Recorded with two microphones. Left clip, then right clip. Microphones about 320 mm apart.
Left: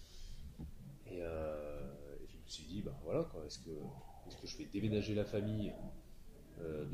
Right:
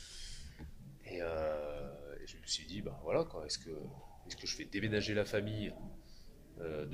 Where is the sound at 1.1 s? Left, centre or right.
Right.